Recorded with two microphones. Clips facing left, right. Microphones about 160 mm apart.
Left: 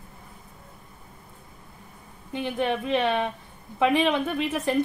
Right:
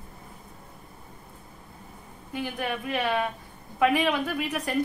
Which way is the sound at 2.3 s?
25° left (ahead or behind).